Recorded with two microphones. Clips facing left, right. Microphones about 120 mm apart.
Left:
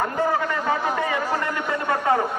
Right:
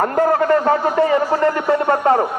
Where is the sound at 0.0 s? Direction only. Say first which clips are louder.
Right 7 dB; 50° right (ahead or behind).